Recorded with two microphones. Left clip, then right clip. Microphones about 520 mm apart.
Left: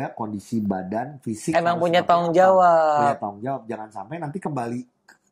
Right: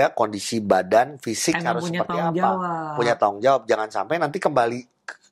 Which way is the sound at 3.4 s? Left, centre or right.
Right.